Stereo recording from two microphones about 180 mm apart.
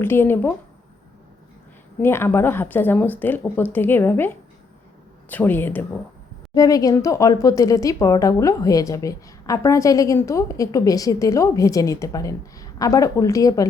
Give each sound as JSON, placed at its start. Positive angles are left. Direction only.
{"t": 0.0, "sound": "speech", "side_deg": 15}
{"t": 2.0, "sound": "speech", "side_deg": 15}
{"t": 5.3, "sound": "speech", "side_deg": 10}